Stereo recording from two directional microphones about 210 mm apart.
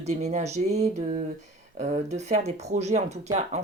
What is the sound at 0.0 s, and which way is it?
Speech, 30° right (ahead or behind).